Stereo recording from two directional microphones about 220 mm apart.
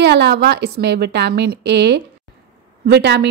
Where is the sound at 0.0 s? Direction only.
50° right (ahead or behind).